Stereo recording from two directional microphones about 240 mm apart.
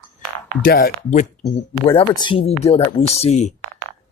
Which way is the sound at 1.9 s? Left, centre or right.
Left.